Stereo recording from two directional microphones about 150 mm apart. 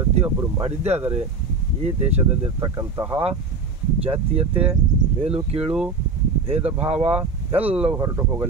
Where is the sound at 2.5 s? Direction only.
20° right (ahead or behind).